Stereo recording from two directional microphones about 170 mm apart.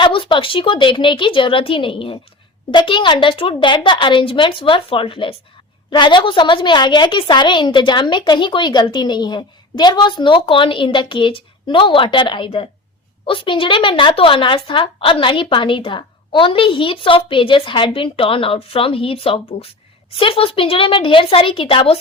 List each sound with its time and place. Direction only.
0.0 s a woman's voice: 30° left (ahead or behind)